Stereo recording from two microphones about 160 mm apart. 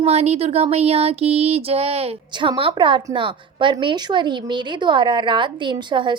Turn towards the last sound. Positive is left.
turn(degrees=-30)  # may be behind; listen again after turning